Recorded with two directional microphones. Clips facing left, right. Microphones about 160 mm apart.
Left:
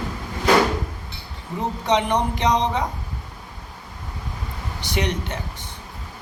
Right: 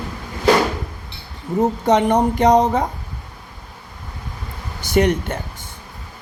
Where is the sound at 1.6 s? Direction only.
45° right (ahead or behind).